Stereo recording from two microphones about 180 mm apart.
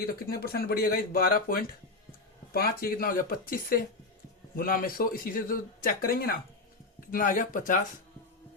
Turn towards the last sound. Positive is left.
turn(degrees=50)  # may be behind; listen again after turning